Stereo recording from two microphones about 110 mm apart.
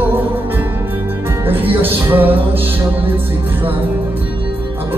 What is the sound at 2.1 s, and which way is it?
Music, 20° right (ahead or behind).